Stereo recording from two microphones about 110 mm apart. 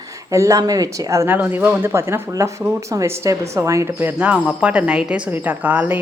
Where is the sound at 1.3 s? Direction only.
15° right (ahead or behind).